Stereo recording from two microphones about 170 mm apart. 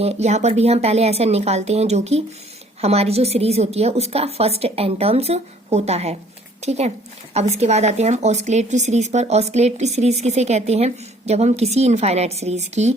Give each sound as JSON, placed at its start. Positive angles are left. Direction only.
{"t": 0.0, "sound": "speech", "side_deg": -40}